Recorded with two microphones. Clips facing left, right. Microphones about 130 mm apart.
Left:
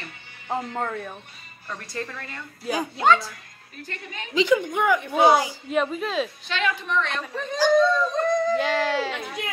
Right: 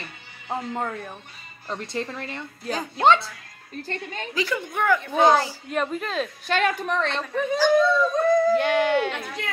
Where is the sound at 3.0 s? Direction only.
25° right (ahead or behind).